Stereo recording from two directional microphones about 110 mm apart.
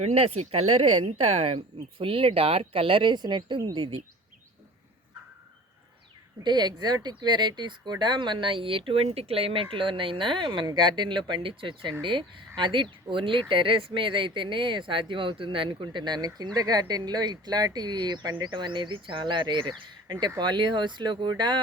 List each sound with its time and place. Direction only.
0.0 s speech: 90° right; by 3.6 s 40° right (ahead or behind)
6.4 s speech: 40° right (ahead or behind)